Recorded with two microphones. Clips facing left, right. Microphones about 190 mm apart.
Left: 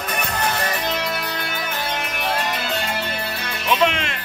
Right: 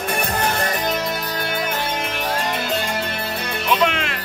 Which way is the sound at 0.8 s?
45° right (ahead or behind).